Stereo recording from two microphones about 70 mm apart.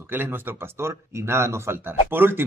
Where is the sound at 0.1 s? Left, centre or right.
Right.